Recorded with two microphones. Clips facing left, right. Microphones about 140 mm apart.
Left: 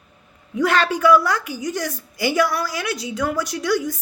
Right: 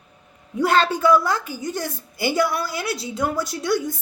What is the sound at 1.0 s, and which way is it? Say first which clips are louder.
A woman's voice: left 2 dB; 25° right (ahead or behind).